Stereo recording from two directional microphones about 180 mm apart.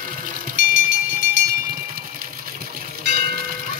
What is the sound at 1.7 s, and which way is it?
Bell, 50° right (ahead or behind).